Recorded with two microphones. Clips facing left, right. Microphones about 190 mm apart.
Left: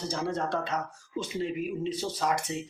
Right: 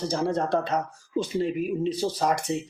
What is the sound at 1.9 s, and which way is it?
Speech, 35° right (ahead or behind).